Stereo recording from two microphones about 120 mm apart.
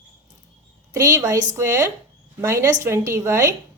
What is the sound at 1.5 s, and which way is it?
A woman's voice, 25° right (ahead or behind).